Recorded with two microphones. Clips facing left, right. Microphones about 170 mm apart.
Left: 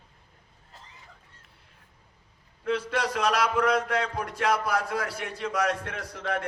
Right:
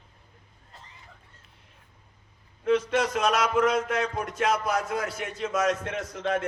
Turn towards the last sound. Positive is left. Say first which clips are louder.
# right 3 dB
turn(degrees=-25)  # may be behind; listen again after turning